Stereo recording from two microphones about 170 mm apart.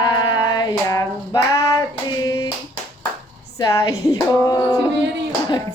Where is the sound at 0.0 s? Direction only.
25° left (ahead or behind).